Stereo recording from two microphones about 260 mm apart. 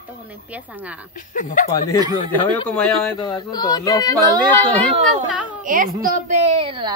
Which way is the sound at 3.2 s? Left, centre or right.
Centre.